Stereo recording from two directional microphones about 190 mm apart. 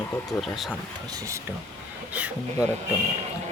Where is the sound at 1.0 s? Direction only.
15° right (ahead or behind).